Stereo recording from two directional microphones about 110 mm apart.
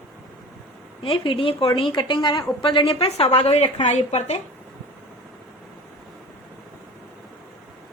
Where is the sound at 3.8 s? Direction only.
90° left.